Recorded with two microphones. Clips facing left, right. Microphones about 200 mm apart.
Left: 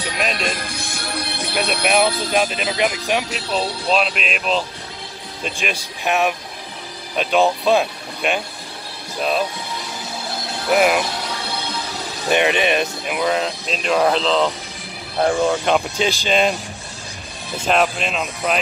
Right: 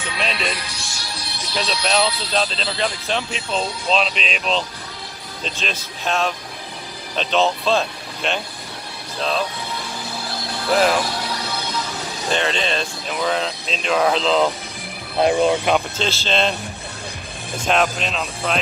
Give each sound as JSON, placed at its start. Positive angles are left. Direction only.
{"t": 0.0, "sound": "speech", "side_deg": 45}
{"t": 2.3, "sound": "speech", "side_deg": 15}
{"t": 10.7, "sound": "speech", "side_deg": 10}
{"t": 12.3, "sound": "speech", "side_deg": 15}
{"t": 15.1, "sound": "speech", "side_deg": -20}
{"t": 16.0, "sound": "speech", "side_deg": 15}
{"t": 17.6, "sound": "speech", "side_deg": 5}